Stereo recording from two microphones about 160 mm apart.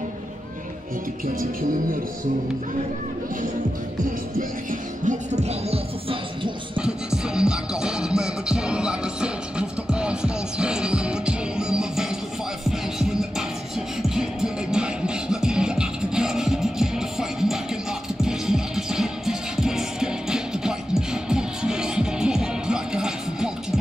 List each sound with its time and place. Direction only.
4.4 s music: 55° right (ahead or behind); by 6.8 s 35° right (ahead or behind)
6.8 s music: 5° right (ahead or behind)